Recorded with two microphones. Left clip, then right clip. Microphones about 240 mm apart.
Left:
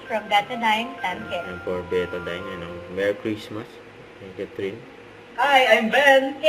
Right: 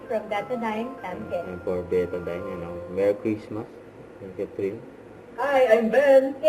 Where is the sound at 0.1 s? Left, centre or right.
Centre.